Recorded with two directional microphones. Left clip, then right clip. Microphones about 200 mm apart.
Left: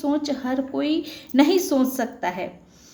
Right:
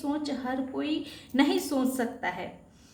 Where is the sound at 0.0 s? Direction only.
40° left (ahead or behind).